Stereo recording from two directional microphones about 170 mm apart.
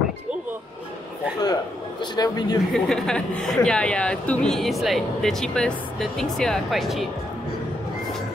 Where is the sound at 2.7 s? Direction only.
5° left (ahead or behind).